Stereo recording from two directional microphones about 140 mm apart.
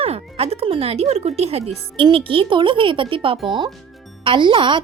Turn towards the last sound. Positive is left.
turn(degrees=-35)  # may be behind; listen again after turning